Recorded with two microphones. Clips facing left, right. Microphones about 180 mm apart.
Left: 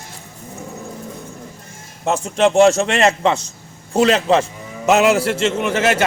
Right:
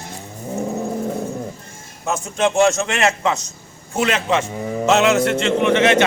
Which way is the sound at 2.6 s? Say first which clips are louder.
Left 3 dB; 35° left (ahead or behind).